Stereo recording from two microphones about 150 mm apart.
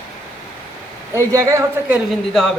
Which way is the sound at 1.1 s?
20° right (ahead or behind).